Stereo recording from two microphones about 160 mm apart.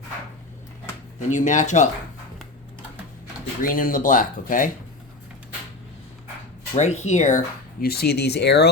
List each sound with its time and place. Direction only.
1.3 s speech: 50° left (ahead or behind)
3.6 s speech: 60° left (ahead or behind)
6.7 s speech: 45° left (ahead or behind)
7.8 s speech: 80° left